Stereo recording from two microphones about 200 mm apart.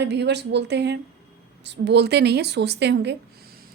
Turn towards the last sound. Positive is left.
turn(degrees=-55)  # may be behind; listen again after turning